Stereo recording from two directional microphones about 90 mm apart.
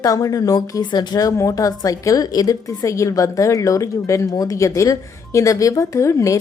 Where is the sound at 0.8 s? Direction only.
55° left (ahead or behind).